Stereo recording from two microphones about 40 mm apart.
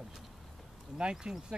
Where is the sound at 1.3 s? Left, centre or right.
Centre.